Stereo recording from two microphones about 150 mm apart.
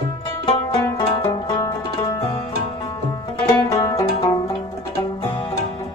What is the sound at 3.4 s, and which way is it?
Music, 20° left (ahead or behind).